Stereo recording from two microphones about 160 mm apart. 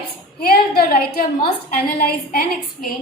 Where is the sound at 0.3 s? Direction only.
70° left (ahead or behind).